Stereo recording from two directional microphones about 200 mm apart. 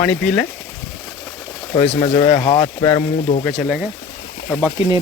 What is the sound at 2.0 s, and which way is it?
Speech, 35° left (ahead or behind).